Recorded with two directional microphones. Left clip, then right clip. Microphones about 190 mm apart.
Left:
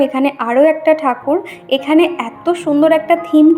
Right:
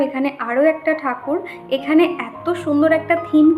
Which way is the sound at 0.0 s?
30° left (ahead or behind).